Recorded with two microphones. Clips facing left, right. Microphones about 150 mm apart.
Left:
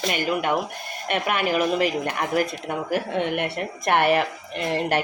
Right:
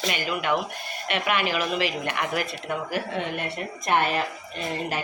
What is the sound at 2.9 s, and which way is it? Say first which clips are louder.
A woman's voice: left 8 dB; 60° left (ahead or behind).